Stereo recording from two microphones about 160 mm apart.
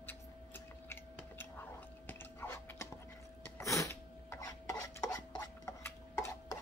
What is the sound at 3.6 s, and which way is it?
Dishes, 20° left (ahead or behind).